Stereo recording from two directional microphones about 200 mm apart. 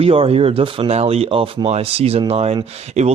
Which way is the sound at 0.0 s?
30° right (ahead or behind).